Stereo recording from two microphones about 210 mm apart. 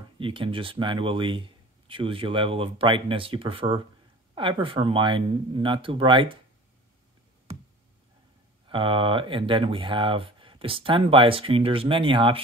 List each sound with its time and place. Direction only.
0.2 s speech: 25° right (ahead or behind)
8.6 s speech: 25° right (ahead or behind)